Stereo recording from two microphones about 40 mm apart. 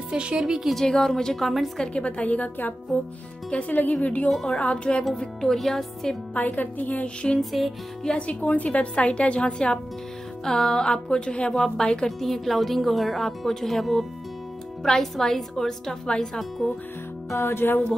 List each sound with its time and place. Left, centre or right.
0.1 s a woman's voice: right
0.7 s a woman's voice: centre
1.4 s speech: centre
2.0 s a woman's voice: left
5.1 s a woman's voice: centre
6.3 s speech: left
7.5 s speech: centre
8.2 s a woman's voice: left
11.5 s a woman's voice: centre
11.8 s a woman's voice: centre
12.2 s a woman's voice: centre
17.5 s music: left